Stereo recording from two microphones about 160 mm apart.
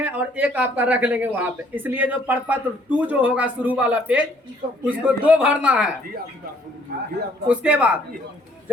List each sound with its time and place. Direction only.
0.0 s speech: 10° right (ahead or behind)
4.6 s speech: 65° right (ahead or behind)
5.0 s speech: 10° right (ahead or behind)
7.4 s speech: 5° right (ahead or behind)